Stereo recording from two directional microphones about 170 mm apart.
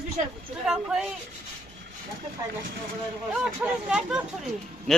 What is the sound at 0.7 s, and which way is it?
Speech, 5° right (ahead or behind).